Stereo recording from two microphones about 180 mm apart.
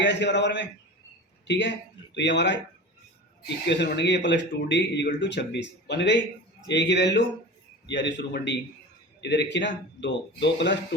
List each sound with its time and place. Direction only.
0.0 s a man's voice: 80° left